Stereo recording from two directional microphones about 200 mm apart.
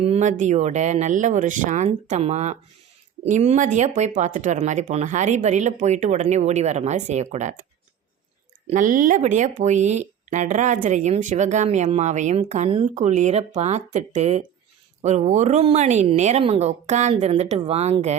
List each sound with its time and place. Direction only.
0.0 s speech: 35° right (ahead or behind)
8.6 s speech: 40° right (ahead or behind)